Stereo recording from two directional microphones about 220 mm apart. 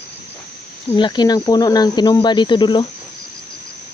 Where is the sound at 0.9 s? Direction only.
20° left (ahead or behind).